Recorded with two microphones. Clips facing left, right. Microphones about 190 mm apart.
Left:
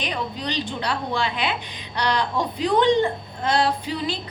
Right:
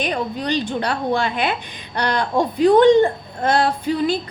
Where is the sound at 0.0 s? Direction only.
50° right (ahead or behind).